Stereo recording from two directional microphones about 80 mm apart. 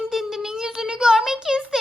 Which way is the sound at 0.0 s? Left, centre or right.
Centre.